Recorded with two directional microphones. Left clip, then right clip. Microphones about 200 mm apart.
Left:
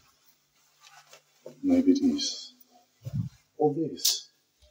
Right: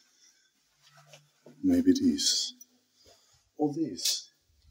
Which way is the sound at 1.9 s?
40° right (ahead or behind).